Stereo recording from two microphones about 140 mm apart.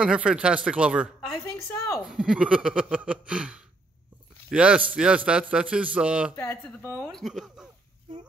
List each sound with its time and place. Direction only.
0.0 s a man's voice: 5° right (ahead or behind)
1.4 s a sound: 20° left (ahead or behind)
2.0 s a man's voice: 5° right (ahead or behind)
6.3 s speech: 20° left (ahead or behind)
7.0 s speech: 5° left (ahead or behind)